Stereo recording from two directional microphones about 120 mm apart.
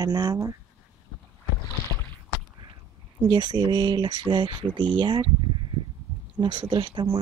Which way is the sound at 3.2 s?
35° right (ahead or behind).